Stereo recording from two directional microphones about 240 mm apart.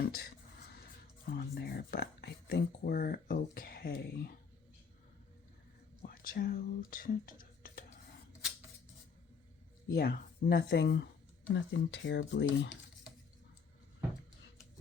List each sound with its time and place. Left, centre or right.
0.0 s music: left
1.4 s speech: left
6.1 s speech: left
9.9 s speech: left